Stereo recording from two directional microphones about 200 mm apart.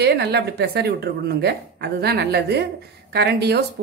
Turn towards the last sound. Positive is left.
turn(degrees=-55)  # may be behind; listen again after turning